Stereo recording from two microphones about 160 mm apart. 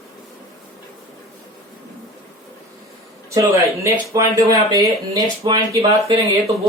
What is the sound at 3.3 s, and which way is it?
Speech, 20° right (ahead or behind).